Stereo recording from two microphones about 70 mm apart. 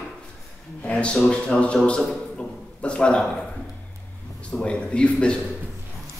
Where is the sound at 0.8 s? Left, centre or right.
Centre.